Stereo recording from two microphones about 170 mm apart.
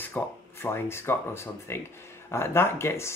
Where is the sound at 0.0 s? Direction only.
15° left (ahead or behind).